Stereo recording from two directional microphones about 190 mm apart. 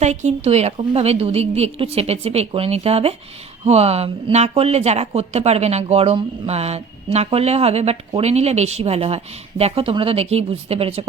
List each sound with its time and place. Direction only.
0.0 s speech: 35° right (ahead or behind)